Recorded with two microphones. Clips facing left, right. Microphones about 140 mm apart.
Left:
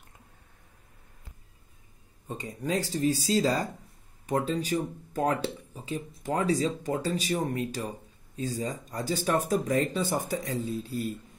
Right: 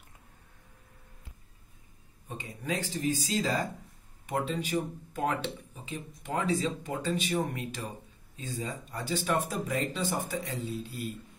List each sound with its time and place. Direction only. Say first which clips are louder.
2.2 s speech: left 3 dB; 35° left (ahead or behind)